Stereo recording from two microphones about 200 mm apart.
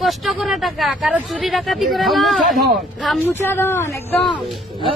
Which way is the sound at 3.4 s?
10° left (ahead or behind).